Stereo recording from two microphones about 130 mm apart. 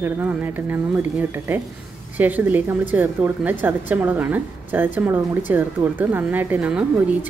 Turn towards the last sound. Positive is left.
turn(degrees=-10)  # may be behind; listen again after turning